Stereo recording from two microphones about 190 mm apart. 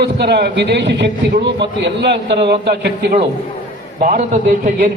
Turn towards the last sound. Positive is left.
turn(degrees=-45)  # may be behind; listen again after turning